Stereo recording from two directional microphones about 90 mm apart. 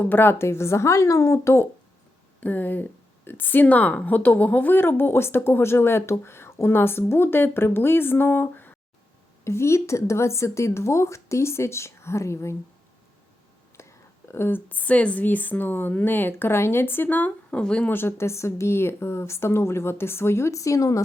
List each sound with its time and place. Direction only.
0.0 s a woman's voice: 20° left (ahead or behind)
2.4 s a woman's voice: 20° left (ahead or behind)
13.8 s a sound: 30° left (ahead or behind)
14.3 s a woman's voice: 25° left (ahead or behind)
17.9 s a woman's voice: 25° left (ahead or behind)